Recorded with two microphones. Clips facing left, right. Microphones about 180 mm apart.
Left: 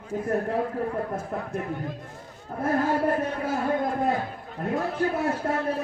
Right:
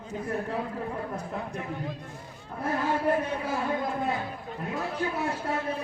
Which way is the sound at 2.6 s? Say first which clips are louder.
Left 3 dB; 50° left (ahead or behind).